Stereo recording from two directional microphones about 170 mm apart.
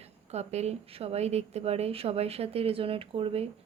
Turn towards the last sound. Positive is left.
turn(degrees=-35)  # may be behind; listen again after turning